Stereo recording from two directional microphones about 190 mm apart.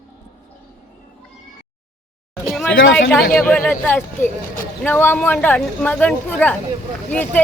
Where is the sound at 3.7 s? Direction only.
10° left (ahead or behind).